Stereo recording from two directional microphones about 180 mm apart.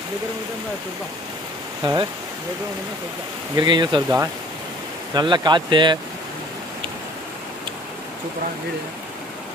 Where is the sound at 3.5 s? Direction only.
25° right (ahead or behind).